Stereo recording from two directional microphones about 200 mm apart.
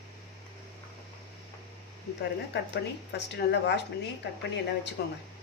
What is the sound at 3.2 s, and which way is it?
Speech, 60° left (ahead or behind).